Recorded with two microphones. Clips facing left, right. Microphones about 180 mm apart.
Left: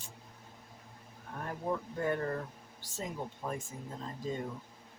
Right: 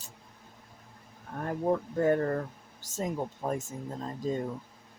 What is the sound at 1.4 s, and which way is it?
Speech, 45° right (ahead or behind).